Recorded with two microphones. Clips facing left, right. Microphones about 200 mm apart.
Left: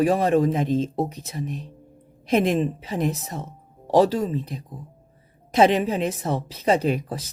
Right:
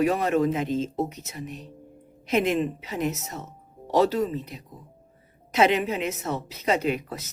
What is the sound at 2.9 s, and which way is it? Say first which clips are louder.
Speech: left 4 dB; 35° left (ahead or behind).